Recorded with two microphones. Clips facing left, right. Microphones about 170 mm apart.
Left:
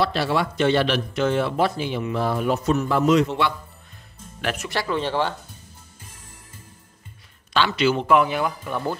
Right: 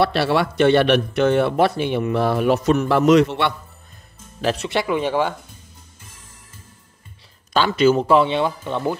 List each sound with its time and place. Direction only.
0.0 s a man's voice: 65° right (ahead or behind)
4.4 s speech: 30° right (ahead or behind)
4.8 s speech: 10° right (ahead or behind)
7.5 s speech: 45° right (ahead or behind); by 8.9 s 25° right (ahead or behind)